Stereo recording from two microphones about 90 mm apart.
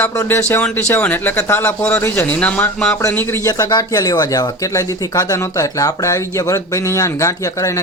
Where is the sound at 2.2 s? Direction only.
15° left (ahead or behind).